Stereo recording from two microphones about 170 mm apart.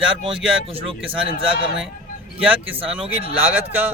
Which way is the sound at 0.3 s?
30° right (ahead or behind).